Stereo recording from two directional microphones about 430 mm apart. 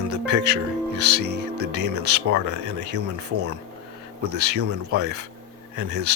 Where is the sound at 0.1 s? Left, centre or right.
Right.